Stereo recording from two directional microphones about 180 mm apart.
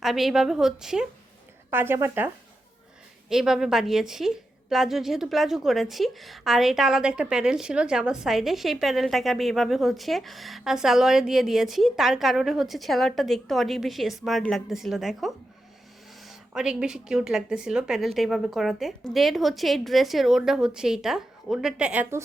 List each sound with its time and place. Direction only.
0.0 s a woman's voice: centre (ahead or behind)